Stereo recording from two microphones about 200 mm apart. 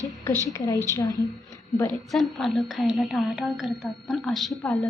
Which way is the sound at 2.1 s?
Centre (ahead or behind).